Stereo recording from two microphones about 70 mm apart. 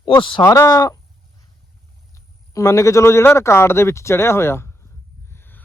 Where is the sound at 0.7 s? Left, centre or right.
Left.